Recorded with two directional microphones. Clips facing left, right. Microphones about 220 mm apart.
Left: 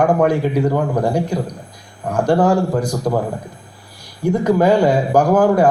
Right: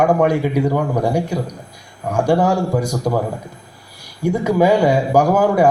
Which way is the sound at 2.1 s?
10° right (ahead or behind).